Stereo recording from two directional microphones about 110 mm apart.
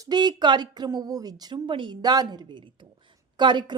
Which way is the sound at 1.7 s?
45° right (ahead or behind).